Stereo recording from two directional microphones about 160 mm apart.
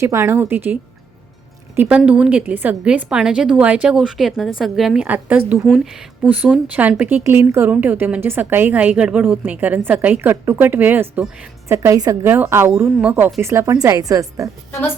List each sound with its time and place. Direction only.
0.0 s speech: 15° right (ahead or behind)